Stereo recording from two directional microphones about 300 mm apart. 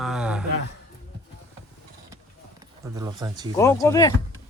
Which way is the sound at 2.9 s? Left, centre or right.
Centre.